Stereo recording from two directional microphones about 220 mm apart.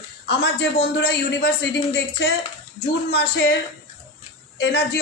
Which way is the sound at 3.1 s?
50° left (ahead or behind).